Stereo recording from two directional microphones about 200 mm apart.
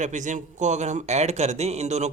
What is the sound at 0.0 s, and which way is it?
Speech, 40° right (ahead or behind).